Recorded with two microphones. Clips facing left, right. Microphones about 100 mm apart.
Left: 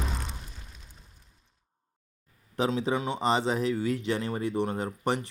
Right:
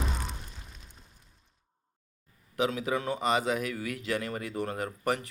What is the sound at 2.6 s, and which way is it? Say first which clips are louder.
Speech: left 2 dB; 30° left (ahead or behind).